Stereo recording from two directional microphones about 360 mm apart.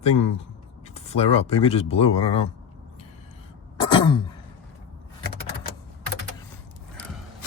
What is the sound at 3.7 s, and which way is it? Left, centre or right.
Throat clearing, centre.